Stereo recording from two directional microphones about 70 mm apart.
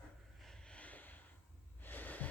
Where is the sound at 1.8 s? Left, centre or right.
Left.